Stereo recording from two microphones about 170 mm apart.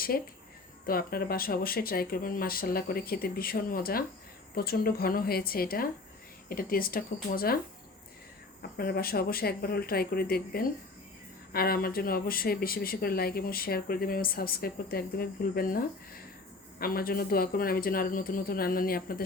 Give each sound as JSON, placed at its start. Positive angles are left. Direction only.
{"t": 0.1, "sound": "speech", "side_deg": 55}
{"t": 8.8, "sound": "speech", "side_deg": 60}
{"t": 16.8, "sound": "speech", "side_deg": 60}